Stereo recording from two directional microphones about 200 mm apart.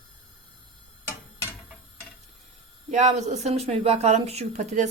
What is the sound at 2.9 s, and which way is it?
Speech, 35° right (ahead or behind).